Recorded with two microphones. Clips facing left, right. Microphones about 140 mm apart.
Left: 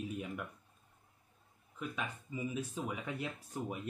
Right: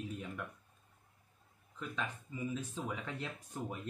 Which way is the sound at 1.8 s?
10° left (ahead or behind).